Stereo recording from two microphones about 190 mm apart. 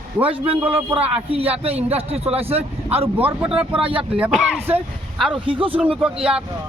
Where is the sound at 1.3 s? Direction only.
30° right (ahead or behind).